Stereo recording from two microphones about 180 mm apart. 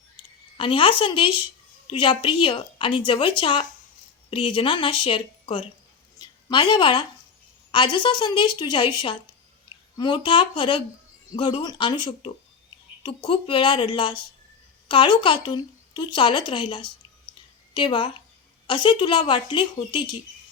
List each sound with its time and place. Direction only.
0.2 s a woman's voice: 30° left (ahead or behind)
6.1 s a sound: 25° left (ahead or behind)
7.7 s a woman's voice: 25° left (ahead or behind)